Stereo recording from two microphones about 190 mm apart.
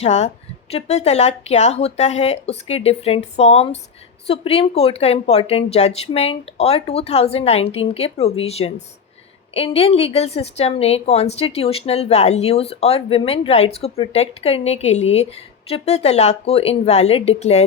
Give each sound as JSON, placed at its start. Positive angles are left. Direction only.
{"t": 0.0, "sound": "a woman's voice", "side_deg": 35}